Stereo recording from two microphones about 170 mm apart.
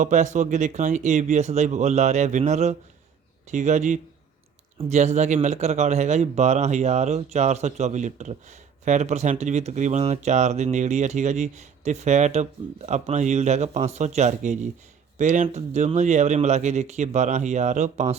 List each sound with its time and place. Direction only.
0.0 s speech: 45° right (ahead or behind)